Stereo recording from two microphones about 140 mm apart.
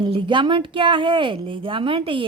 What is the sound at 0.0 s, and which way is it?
A woman's voice, 35° right (ahead or behind).